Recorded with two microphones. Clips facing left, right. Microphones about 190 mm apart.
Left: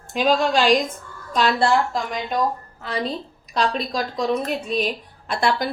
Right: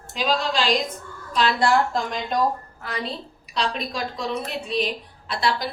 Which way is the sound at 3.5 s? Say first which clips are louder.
Left 4 dB; 40° left (ahead or behind).